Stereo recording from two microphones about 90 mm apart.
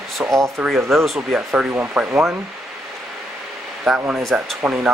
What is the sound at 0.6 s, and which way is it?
Speech, 5° right (ahead or behind).